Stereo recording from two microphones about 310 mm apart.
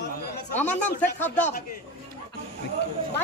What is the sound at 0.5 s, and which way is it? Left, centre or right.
Speech, centre.